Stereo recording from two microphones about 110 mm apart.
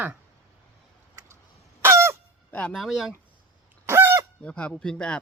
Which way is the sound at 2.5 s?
10° left (ahead or behind).